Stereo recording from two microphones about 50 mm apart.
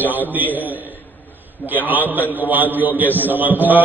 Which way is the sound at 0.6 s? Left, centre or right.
Right.